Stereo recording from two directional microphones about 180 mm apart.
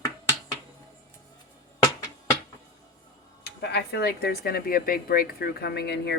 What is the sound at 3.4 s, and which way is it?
A woman's voice, 65° left (ahead or behind).